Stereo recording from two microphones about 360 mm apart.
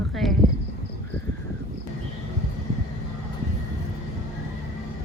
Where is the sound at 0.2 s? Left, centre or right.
Centre.